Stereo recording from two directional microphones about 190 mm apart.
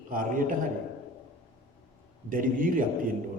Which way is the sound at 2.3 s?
45° right (ahead or behind).